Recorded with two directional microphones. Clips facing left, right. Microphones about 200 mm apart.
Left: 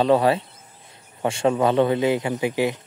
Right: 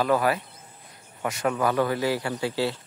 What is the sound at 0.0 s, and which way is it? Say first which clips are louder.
Speech: left 5 dB; 25° left (ahead or behind).